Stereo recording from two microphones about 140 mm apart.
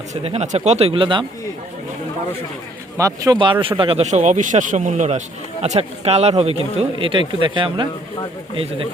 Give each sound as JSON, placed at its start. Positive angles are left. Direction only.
{"t": 0.1, "sound": "speech", "side_deg": -50}
{"t": 3.0, "sound": "speech", "side_deg": -25}
{"t": 3.3, "sound": "speech", "side_deg": -35}
{"t": 7.0, "sound": "speech", "side_deg": -35}